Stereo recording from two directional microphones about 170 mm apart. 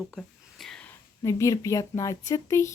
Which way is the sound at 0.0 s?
Centre (ahead or behind).